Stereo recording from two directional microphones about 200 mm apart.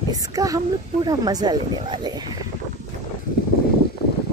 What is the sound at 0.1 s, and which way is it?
Speech, 15° right (ahead or behind).